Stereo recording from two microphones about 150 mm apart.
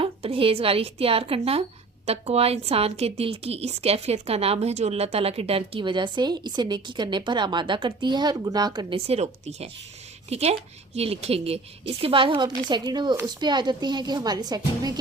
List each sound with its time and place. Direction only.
0.0 s a woman's voice: 40° right (ahead or behind)
9.0 s a woman's voice: 45° right (ahead or behind); by 14.9 s 25° right (ahead or behind)